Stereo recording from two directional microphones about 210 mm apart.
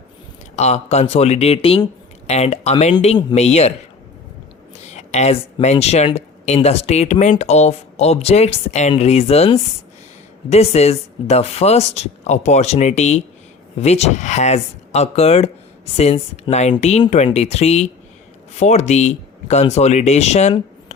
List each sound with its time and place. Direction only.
0.5 s speech: 30° left (ahead or behind)
4.9 s speech: 30° left (ahead or behind)